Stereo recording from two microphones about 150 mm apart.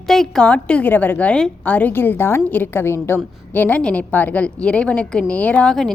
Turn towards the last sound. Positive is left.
turn(degrees=5)  # may be behind; listen again after turning